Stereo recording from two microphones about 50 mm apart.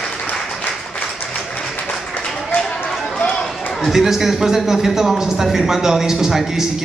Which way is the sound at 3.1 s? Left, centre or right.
Left.